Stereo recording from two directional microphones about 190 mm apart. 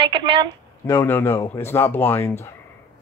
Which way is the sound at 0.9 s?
10° left (ahead or behind).